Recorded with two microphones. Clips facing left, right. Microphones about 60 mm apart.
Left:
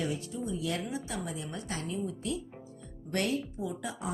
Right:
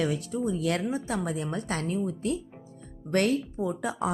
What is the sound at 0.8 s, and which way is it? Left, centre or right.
Speech, right.